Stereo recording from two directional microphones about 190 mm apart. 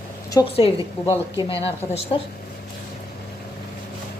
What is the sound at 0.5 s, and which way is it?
A woman's voice, 30° left (ahead or behind).